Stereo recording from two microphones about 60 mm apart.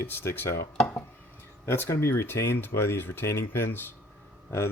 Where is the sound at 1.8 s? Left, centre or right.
Left.